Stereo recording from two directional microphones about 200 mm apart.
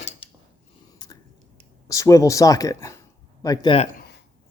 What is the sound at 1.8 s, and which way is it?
Speech, 15° left (ahead or behind).